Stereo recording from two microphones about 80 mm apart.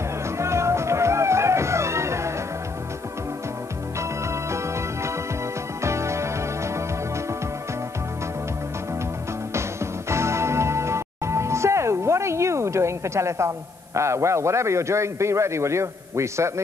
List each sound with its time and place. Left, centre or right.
0.4 s music: right
5.8 s music: right
9.5 s music: right
13.9 s a man's voice: right